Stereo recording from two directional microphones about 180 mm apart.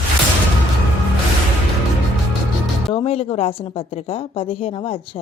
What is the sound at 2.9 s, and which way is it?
A woman's voice, 30° left (ahead or behind).